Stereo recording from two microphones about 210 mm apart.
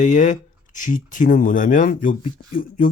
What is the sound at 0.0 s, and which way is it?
Speech, 35° left (ahead or behind).